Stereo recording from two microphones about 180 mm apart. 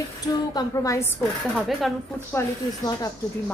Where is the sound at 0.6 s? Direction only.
20° left (ahead or behind).